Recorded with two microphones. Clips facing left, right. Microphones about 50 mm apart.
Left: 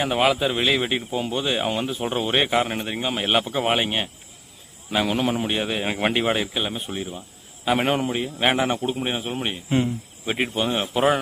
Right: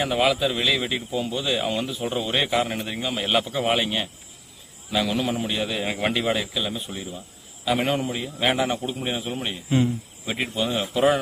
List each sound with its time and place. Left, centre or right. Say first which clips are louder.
0.0 s speech: left 1 dB; centre